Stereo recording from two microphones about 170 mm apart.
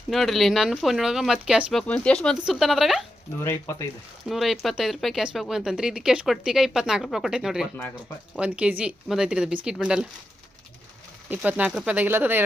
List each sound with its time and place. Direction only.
0.1 s speech: centre (ahead or behind)
3.3 s speech: 15° left (ahead or behind)
4.3 s speech: centre (ahead or behind)
11.3 s speech: 10° right (ahead or behind)